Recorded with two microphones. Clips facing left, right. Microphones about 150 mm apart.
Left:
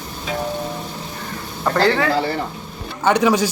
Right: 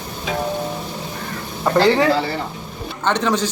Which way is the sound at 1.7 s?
10° right (ahead or behind).